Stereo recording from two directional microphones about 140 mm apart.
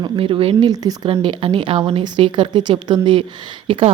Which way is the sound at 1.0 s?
40° right (ahead or behind).